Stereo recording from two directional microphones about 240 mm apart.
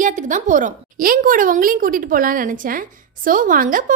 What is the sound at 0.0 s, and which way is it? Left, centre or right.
A woman's voice, right.